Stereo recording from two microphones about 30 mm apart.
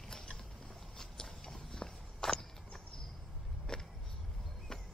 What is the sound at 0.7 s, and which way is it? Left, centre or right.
Walk, centre.